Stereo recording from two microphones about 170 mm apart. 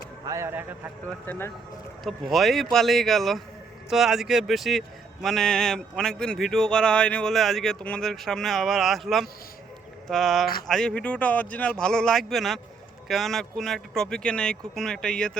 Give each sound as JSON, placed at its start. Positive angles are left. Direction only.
{"t": 0.3, "sound": "speech", "side_deg": -15}
{"t": 2.0, "sound": "speech", "side_deg": 0}